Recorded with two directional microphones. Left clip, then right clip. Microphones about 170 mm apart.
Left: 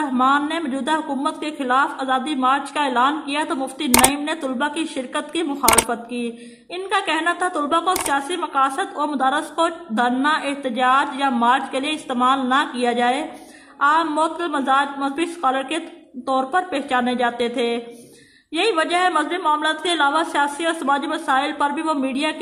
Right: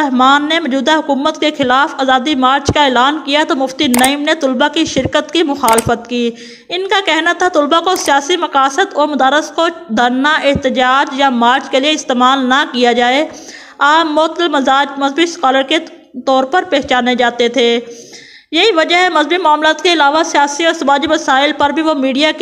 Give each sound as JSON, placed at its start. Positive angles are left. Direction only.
{"t": 0.2, "sound": "a woman's voice", "side_deg": -35}